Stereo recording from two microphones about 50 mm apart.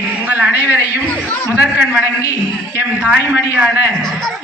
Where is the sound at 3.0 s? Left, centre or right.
Right.